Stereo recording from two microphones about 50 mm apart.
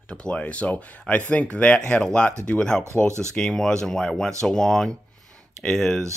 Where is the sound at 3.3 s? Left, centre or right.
Centre.